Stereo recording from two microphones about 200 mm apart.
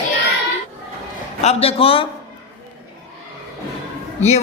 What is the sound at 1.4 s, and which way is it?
Speech, 30° left (ahead or behind).